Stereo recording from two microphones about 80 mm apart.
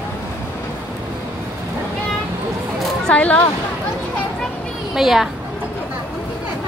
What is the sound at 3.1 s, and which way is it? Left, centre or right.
Speech, centre.